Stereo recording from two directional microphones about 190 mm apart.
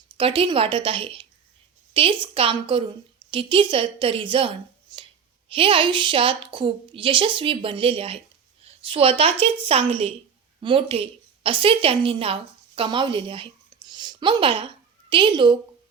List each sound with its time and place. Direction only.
0.2 s a woman's voice: 25° right (ahead or behind)